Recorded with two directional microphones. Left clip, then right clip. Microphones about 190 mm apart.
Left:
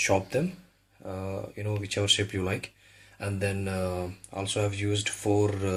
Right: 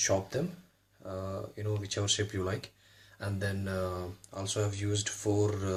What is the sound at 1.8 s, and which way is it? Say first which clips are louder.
Speech: left 7 dB; 35° left (ahead or behind).